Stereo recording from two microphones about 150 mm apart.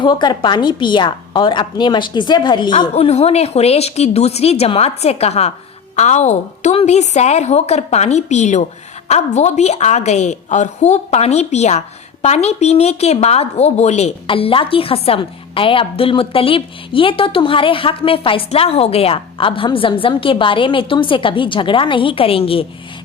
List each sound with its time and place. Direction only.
0.0 s a woman's voice: 30° left (ahead or behind)
2.9 s a woman's voice: 45° left (ahead or behind)
14.3 s a woman's voice: 35° left (ahead or behind)